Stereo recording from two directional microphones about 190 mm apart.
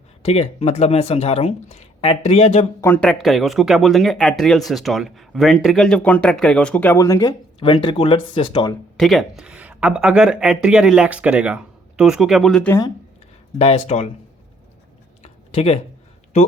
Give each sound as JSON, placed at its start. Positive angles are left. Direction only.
{"t": 0.2, "sound": "speech", "side_deg": 35}
{"t": 2.8, "sound": "speech", "side_deg": 5}
{"t": 9.0, "sound": "speech", "side_deg": 0}
{"t": 13.6, "sound": "speech", "side_deg": 35}
{"t": 15.2, "sound": "a sound", "side_deg": 35}